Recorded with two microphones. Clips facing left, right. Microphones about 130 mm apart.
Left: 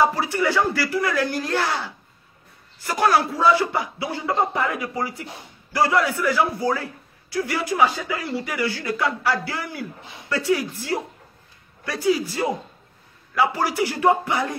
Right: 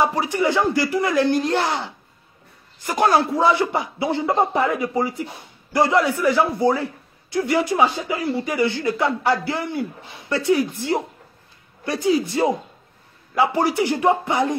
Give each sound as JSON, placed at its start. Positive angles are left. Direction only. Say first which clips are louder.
{"t": 0.0, "sound": "a man's voice", "louder": "right 1 dB", "side_deg": -20}